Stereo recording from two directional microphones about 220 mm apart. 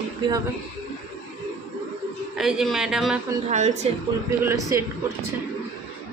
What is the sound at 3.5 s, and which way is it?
Speech, 30° right (ahead or behind).